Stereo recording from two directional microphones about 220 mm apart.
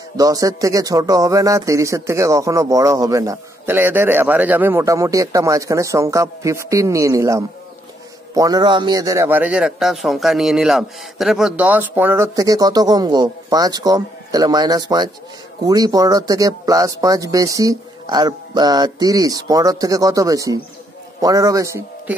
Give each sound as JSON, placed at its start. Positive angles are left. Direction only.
{"t": 0.2, "sound": "a man's voice", "side_deg": -15}